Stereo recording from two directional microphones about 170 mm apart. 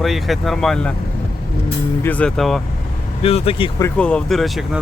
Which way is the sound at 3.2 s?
35° left (ahead or behind).